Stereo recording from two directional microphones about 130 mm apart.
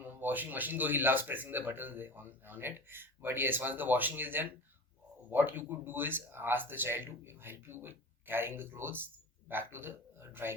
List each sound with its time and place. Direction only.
0.0 s speech: 15° right (ahead or behind)